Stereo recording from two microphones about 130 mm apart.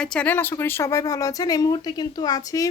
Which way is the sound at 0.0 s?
10° left (ahead or behind).